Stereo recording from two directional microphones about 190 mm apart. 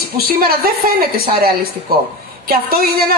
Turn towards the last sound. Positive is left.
turn(degrees=-50)  # may be behind; listen again after turning